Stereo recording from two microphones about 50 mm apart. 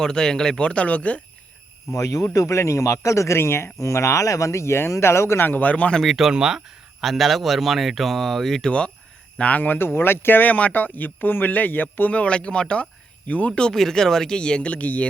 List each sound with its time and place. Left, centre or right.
0.0 s speech: centre
0.6 s speech: left
2.4 s a man's voice: left
3.3 s speech: left
5.5 s speech: left
6.0 s speech: centre
8.6 s speech: centre
9.4 s speech: left
9.7 s speech: left
10.5 s speech: left
13.7 s speech: centre; by 15.0 s left